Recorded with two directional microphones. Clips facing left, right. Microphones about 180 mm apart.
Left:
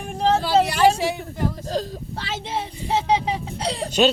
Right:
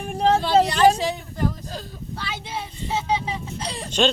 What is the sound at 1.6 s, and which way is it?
Speech, 35° left (ahead or behind).